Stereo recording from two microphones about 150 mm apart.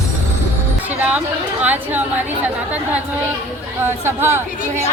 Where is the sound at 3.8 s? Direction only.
15° right (ahead or behind).